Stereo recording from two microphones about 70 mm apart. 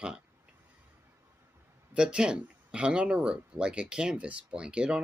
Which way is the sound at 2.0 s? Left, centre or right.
Centre.